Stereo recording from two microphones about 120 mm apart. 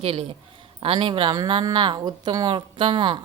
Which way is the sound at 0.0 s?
55° right (ahead or behind).